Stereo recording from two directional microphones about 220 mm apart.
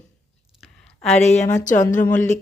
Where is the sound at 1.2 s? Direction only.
30° left (ahead or behind).